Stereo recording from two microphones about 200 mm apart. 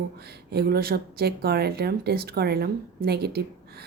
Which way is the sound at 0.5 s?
50° right (ahead or behind).